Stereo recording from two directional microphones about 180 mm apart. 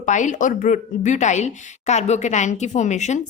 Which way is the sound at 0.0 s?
45° left (ahead or behind).